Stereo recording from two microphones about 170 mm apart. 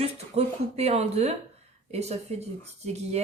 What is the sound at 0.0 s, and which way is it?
Speech, 40° right (ahead or behind).